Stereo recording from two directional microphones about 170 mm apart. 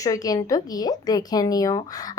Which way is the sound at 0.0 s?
20° left (ahead or behind).